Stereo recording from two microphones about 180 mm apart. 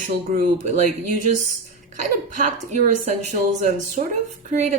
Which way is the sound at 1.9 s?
45° right (ahead or behind).